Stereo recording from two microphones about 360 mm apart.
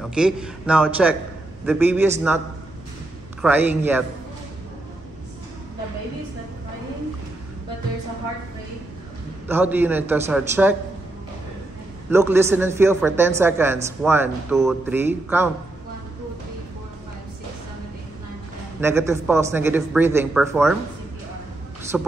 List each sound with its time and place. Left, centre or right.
0.0 s a man's voice: centre
3.4 s a man's voice: centre
9.5 s a man's voice: centre
12.1 s speech: centre
18.8 s speech: centre
21.9 s a man's voice: centre